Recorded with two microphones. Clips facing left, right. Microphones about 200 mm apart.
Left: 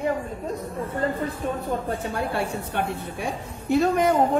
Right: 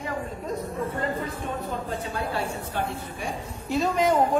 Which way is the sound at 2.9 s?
60° left (ahead or behind).